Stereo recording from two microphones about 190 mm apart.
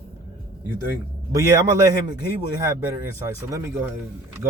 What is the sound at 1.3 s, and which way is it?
Speech, 15° right (ahead or behind).